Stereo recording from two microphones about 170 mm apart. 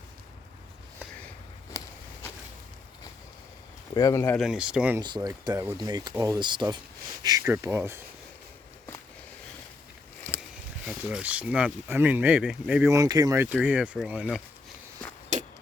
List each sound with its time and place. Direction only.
1.7 s a sound: 20° left (ahead or behind)
3.9 s speech: 20° left (ahead or behind)
4.4 s speech: 5° right (ahead or behind)
4.9 s speech: 25° right (ahead or behind)
10.8 s speech: 10° right (ahead or behind)
13.5 s speech: 5° right (ahead or behind)
15.3 s clang: 45° right (ahead or behind)